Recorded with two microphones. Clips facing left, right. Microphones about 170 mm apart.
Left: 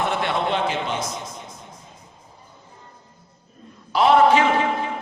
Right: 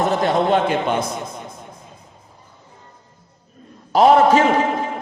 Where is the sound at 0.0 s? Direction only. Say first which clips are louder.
Right 5 dB; 40° right (ahead or behind).